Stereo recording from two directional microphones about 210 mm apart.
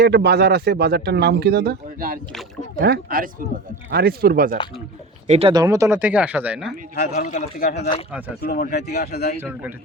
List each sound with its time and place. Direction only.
0.0 s speech: 50° right (ahead or behind)
5.3 s speech: 25° right (ahead or behind); by 6.7 s 5° right (ahead or behind)
6.9 s speech: 50° left (ahead or behind)
7.2 s a man's voice: 35° left (ahead or behind)
8.4 s speech: 45° left (ahead or behind)
9.4 s speech: 10° right (ahead or behind)